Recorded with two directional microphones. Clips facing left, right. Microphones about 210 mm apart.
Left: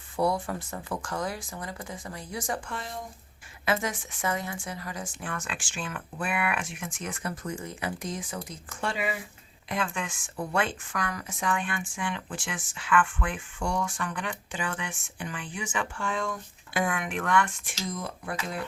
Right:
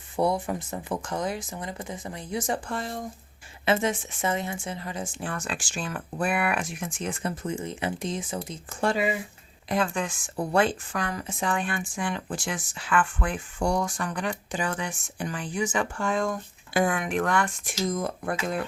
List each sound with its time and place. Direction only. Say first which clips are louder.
0.2 s speech: right 2 dB; 20° right (ahead or behind)
3.7 s speech: right 4 dB; 25° right (ahead or behind)
8.8 s a woman's voice: right 6 dB; 40° right (ahead or behind)